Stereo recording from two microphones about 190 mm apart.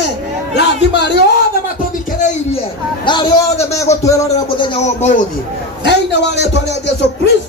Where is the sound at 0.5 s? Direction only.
65° left (ahead or behind).